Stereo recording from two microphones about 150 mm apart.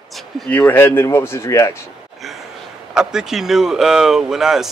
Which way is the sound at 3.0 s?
5° right (ahead or behind).